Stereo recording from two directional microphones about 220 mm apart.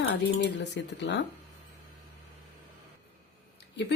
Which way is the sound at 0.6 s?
50° left (ahead or behind).